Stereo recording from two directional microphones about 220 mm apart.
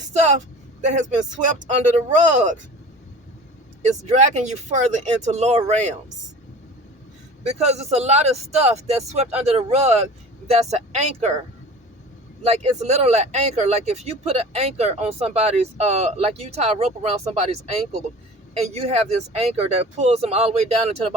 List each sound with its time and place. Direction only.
0.1 s speech: 30° right (ahead or behind)
2.1 s speech: 35° right (ahead or behind)
3.8 s speech: 30° right (ahead or behind)
7.4 s speech: 30° right (ahead or behind)
12.5 s speech: 30° right (ahead or behind)